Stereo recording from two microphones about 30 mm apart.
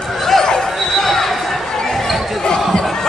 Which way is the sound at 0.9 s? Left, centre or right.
Centre.